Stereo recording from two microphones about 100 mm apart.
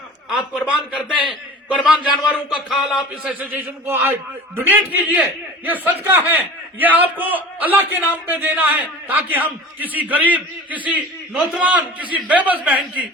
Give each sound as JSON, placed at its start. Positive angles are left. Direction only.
{"t": 0.3, "sound": "a man's voice", "side_deg": -10}